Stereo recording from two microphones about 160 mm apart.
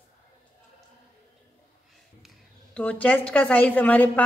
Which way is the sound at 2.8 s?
10° left (ahead or behind).